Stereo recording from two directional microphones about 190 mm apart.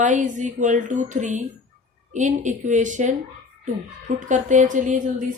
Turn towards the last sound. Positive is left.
turn(degrees=-40)  # may be behind; listen again after turning